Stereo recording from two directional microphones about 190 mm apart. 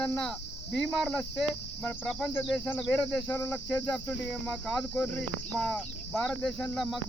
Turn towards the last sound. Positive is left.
turn(degrees=0)  # may be behind; listen again after turning